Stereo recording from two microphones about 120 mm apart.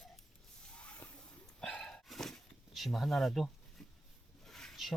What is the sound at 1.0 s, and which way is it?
Dog, 15° left (ahead or behind).